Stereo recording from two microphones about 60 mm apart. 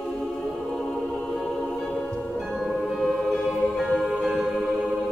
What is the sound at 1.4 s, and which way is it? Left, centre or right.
Music, centre.